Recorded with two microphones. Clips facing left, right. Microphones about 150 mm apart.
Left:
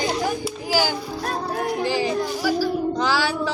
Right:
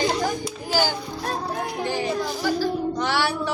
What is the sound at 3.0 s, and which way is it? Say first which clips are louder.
Child singing: left 2 dB; 90° left.